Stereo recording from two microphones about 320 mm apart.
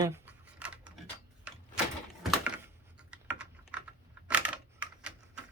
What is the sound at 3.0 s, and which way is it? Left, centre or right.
Typing, centre.